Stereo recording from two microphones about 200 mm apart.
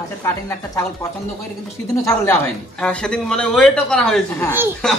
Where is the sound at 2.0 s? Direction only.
10° left (ahead or behind).